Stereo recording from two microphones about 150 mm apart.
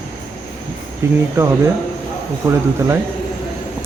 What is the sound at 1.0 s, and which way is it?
Speech, 20° right (ahead or behind).